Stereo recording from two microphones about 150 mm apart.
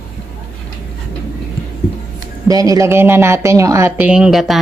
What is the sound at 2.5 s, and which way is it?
A woman's voice, 25° right (ahead or behind).